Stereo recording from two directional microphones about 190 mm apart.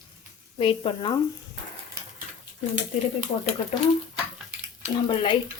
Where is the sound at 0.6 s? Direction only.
25° left (ahead or behind).